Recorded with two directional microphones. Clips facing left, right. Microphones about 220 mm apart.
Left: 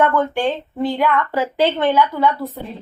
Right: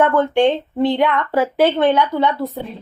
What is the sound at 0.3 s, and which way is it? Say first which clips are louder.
Speech: right 5 dB; 30° right (ahead or behind).